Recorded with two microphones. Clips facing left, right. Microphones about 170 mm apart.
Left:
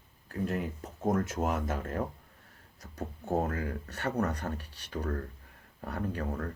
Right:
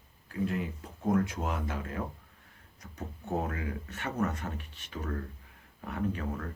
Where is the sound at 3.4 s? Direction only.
40° left (ahead or behind).